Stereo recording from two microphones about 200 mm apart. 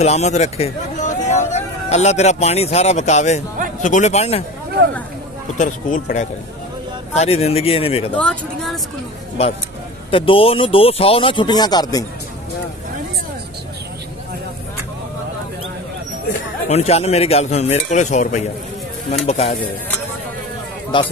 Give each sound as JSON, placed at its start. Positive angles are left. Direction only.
{"t": 0.0, "sound": "a man's voice", "side_deg": 35}
{"t": 5.6, "sound": "speech", "side_deg": 40}
{"t": 8.1, "sound": "speech", "side_deg": 5}
{"t": 10.1, "sound": "speech", "side_deg": 25}
{"t": 16.6, "sound": "speech", "side_deg": 30}
{"t": 20.9, "sound": "speech", "side_deg": 25}